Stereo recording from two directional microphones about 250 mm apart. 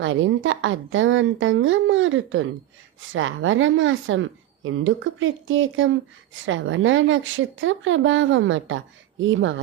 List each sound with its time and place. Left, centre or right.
0.0 s a woman's voice: right